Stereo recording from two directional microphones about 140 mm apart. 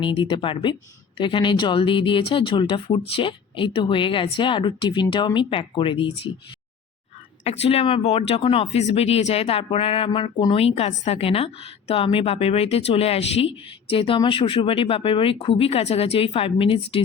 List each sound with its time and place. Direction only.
0.0 s speech: 35° left (ahead or behind)
7.4 s a woman's voice: 50° left (ahead or behind)